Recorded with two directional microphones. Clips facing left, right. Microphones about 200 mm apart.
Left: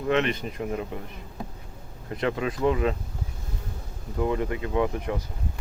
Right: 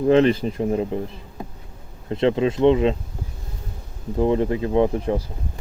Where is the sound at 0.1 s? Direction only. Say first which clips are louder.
Right 8 dB; 30° right (ahead or behind).